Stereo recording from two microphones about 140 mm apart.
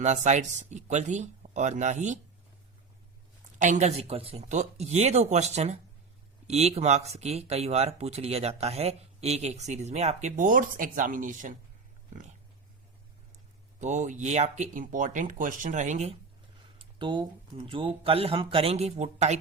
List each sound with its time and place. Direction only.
0.0 s speech: 55° right (ahead or behind)
3.6 s speech: 60° right (ahead or behind)
13.7 s speech: 60° right (ahead or behind)
16.7 s speech: 35° right (ahead or behind); by 19.4 s 50° right (ahead or behind)